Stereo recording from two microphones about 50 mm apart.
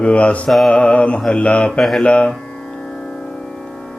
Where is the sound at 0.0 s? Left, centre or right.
Left.